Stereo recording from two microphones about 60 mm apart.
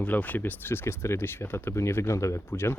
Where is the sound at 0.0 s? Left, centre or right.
Left.